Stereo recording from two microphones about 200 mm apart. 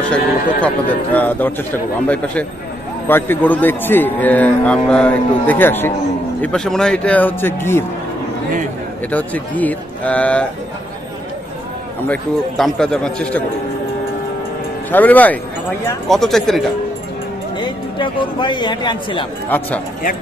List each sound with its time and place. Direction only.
0.1 s a man's voice: 5° left (ahead or behind)
3.1 s a man's voice: 10° left (ahead or behind)
9.1 s a man's voice: 10° left (ahead or behind)
12.1 s a man's voice: centre (ahead or behind)
14.9 s a man's voice: 10° left (ahead or behind)
17.6 s a man's voice: 25° left (ahead or behind)
19.5 s a man's voice: 10° left (ahead or behind)